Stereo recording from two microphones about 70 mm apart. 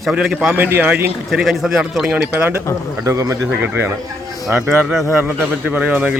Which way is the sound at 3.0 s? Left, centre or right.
Right.